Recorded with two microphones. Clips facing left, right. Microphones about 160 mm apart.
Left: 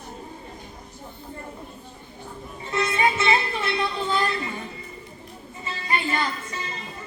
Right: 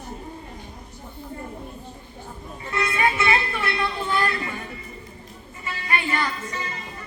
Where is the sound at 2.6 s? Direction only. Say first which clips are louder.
Left 1 dB; 20° left (ahead or behind).